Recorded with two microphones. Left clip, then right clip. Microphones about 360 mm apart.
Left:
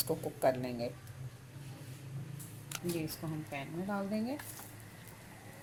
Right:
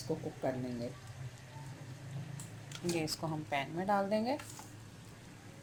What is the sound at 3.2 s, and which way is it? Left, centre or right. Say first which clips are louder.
Speech: right 4 dB; right.